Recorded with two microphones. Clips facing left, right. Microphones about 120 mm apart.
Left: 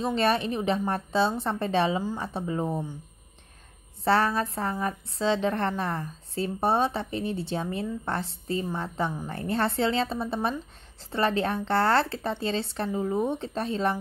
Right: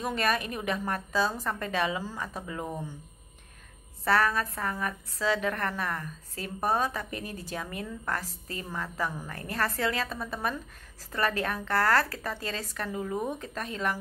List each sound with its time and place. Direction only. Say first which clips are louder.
0.0 s a woman's voice: left 4 dB; 30° left (ahead or behind)
4.0 s a woman's voice: left 2 dB; 30° left (ahead or behind)